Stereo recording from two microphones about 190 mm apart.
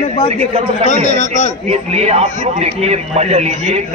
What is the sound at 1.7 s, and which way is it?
A man's voice, 35° right (ahead or behind).